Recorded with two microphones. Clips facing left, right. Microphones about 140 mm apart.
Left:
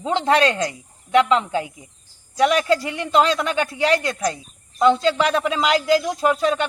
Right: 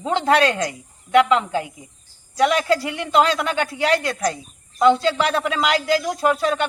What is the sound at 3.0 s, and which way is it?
Speech, 5° right (ahead or behind).